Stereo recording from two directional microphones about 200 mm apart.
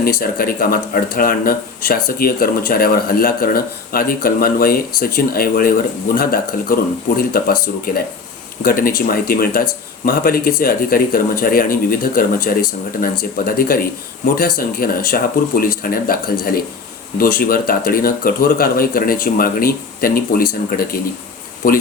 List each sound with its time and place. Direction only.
0.0 s speech: 45° left (ahead or behind)